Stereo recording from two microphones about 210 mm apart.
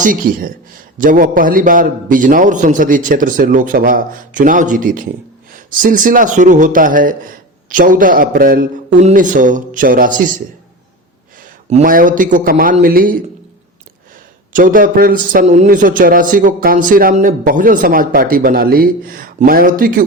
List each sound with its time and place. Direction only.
0.0 s a man's voice: 40° right (ahead or behind)
11.3 s a man's voice: 40° right (ahead or behind)
14.5 s a man's voice: 40° right (ahead or behind)